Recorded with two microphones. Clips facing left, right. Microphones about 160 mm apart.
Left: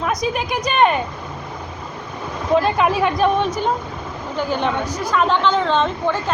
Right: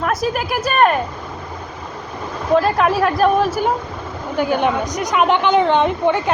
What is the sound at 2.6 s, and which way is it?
A woman's voice, centre (ahead or behind).